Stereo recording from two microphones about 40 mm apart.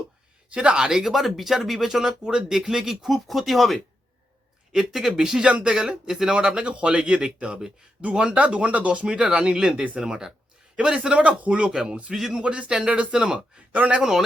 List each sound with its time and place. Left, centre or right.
0.5 s speech: right
1.0 s speech: centre
4.8 s speech: centre
5.5 s speech: right
12.1 s speech: centre
12.4 s speech: right
14.0 s speech: centre